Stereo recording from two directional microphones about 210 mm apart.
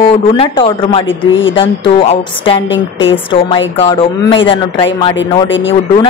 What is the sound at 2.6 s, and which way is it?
Speech, 60° left (ahead or behind).